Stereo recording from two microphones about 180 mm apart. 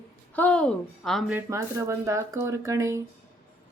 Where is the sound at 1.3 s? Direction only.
15° right (ahead or behind).